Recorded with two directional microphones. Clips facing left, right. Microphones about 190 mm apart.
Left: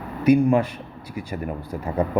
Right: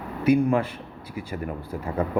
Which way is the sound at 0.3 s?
15° left (ahead or behind).